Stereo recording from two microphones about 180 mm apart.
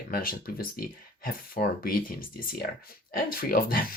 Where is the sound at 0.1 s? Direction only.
55° left (ahead or behind).